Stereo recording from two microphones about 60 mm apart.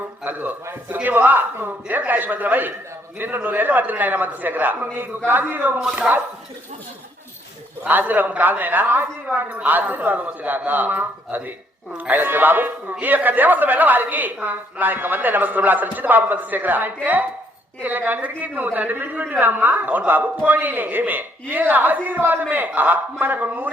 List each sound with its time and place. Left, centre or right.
0.3 s a man's voice: right
7.9 s a man's voice: right